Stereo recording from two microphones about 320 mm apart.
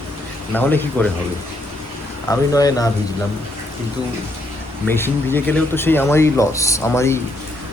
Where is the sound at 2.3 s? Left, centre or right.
Centre.